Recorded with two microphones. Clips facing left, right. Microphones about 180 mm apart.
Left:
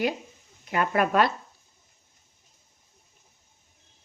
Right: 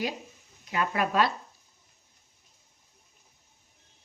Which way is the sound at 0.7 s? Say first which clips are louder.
Left 4 dB; 55° left (ahead or behind).